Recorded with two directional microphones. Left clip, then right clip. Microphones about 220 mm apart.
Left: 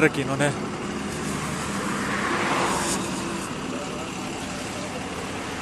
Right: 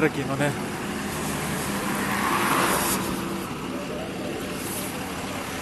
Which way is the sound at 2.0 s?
45° right (ahead or behind).